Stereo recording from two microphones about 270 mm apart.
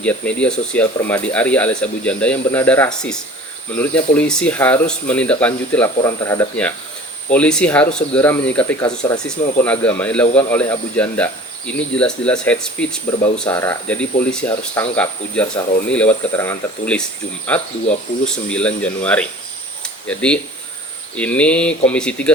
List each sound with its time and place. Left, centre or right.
0.0 s speech: centre
19.8 s a sound: centre
21.2 s speech: centre